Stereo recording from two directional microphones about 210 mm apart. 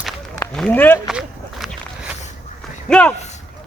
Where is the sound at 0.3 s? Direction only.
5° left (ahead or behind).